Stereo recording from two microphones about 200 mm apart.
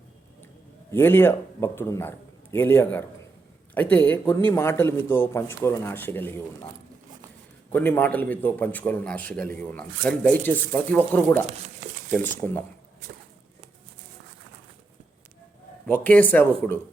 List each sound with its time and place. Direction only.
0.9 s a man's voice: 10° left (ahead or behind)
7.7 s a man's voice: 10° left (ahead or behind)
15.9 s a man's voice: 10° left (ahead or behind)